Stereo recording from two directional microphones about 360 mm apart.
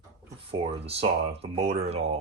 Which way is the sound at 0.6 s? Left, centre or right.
Centre.